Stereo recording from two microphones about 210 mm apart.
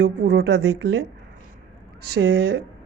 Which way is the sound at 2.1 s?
55° right (ahead or behind).